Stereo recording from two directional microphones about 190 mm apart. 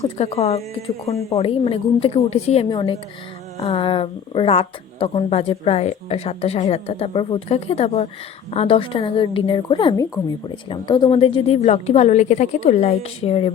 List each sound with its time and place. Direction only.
0.2 s a woman's voice: 35° left (ahead or behind)